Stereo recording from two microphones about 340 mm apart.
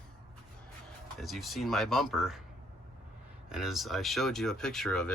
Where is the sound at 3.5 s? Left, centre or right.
Centre.